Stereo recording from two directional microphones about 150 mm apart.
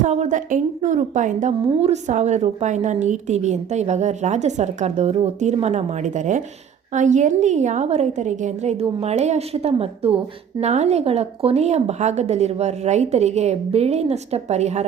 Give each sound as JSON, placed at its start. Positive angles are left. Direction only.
{"t": 0.0, "sound": "a woman's voice", "side_deg": -50}